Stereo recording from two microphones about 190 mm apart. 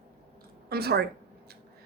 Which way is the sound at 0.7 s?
55° right (ahead or behind).